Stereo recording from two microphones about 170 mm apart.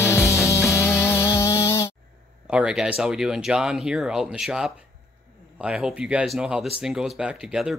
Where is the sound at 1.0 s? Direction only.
15° left (ahead or behind).